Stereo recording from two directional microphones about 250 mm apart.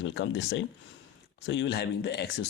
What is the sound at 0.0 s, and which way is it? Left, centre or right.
Speech, left.